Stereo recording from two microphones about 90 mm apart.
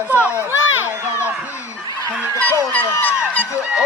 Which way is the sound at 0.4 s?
20° right (ahead or behind).